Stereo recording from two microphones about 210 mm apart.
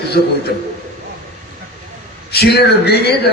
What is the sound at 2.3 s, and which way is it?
Speech, 50° left (ahead or behind).